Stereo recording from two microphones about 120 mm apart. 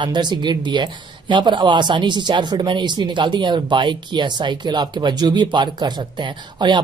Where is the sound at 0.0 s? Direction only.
40° right (ahead or behind).